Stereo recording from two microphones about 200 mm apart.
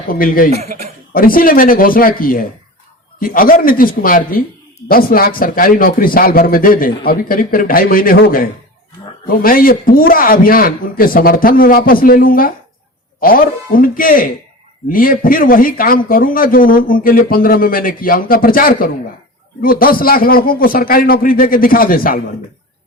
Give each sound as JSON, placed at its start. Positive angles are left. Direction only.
{"t": 0.1, "sound": "a man's voice", "side_deg": 45}